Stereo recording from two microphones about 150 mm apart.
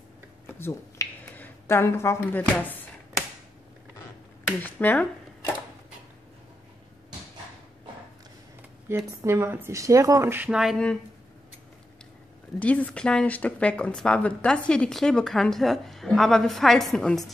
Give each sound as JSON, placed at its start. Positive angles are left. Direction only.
{"t": 0.6, "sound": "finger snapping", "side_deg": 15}
{"t": 4.6, "sound": "speech", "side_deg": 10}
{"t": 8.8, "sound": "speech", "side_deg": -15}
{"t": 12.5, "sound": "speech", "side_deg": 10}